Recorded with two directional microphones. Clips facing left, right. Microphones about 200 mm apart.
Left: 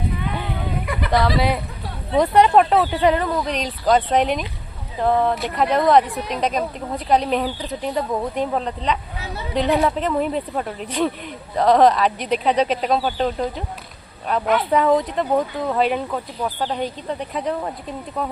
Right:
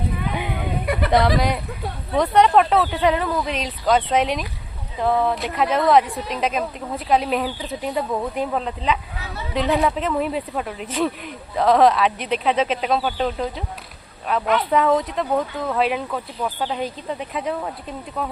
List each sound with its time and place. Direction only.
0.3 s a sound: 15° right (ahead or behind)
1.4 s speech: 5° left (ahead or behind)
15.3 s speech: 15° left (ahead or behind); by 18.3 s centre (ahead or behind)